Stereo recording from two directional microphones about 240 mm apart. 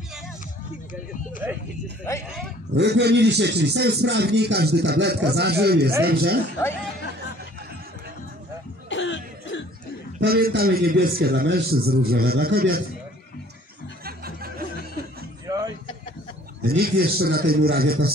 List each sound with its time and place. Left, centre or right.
1.4 s speech: centre
2.7 s a man's voice: right
8.8 s cough: left
10.1 s a man's voice: right
14.0 s music: right
15.4 s a sound: centre
16.6 s a man's voice: right